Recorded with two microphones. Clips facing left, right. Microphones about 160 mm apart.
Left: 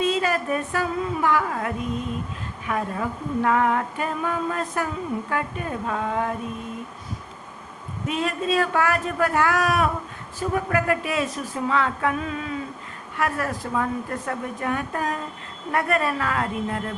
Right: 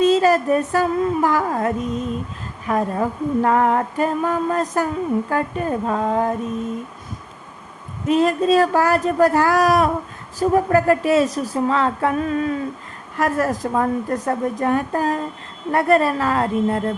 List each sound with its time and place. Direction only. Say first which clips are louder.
0.0 s speech: right 8 dB; 40° right (ahead or behind)
8.0 s speech: right 9 dB; 40° right (ahead or behind)